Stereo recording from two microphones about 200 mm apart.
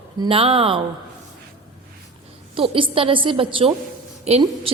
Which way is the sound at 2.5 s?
25° right (ahead or behind).